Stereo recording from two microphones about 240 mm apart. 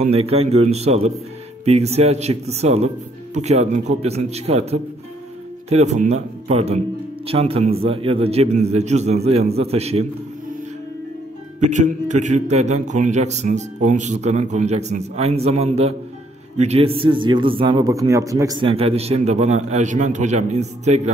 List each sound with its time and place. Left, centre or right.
0.0 s speech: right
11.6 s speech: right